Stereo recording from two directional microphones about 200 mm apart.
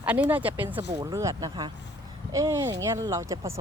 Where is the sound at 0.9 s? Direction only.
20° right (ahead or behind).